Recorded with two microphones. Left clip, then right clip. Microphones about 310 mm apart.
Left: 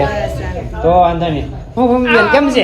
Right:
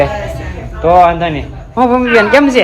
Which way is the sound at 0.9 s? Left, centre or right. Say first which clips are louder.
Right 3 dB; right.